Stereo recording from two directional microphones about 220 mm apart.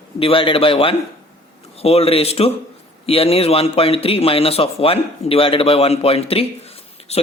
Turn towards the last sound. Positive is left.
turn(degrees=25)  # may be behind; listen again after turning